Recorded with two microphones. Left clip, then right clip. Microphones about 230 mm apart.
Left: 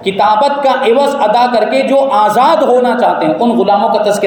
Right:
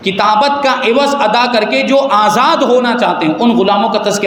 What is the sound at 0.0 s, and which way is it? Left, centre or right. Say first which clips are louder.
A man's voice: left 1 dB; right.